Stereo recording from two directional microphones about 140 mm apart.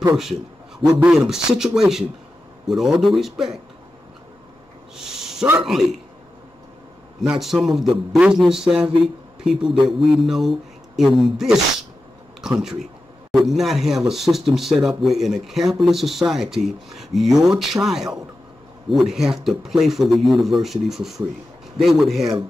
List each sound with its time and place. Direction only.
0.1 s speech: centre (ahead or behind)
4.9 s a sound: 5° right (ahead or behind)
5.6 s speech: centre (ahead or behind)
7.2 s speech: centre (ahead or behind)